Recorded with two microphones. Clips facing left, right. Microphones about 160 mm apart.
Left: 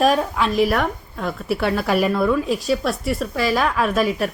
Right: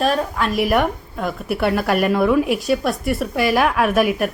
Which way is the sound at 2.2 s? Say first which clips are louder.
Right 3 dB; 15° right (ahead or behind).